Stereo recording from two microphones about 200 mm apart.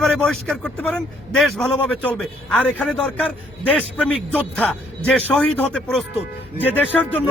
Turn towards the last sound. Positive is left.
turn(degrees=10)  # may be behind; listen again after turning